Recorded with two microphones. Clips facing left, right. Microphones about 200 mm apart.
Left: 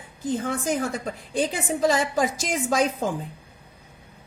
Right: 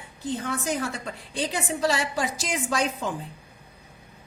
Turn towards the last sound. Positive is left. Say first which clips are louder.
# left 4 dB
turn(degrees=45)  # may be behind; listen again after turning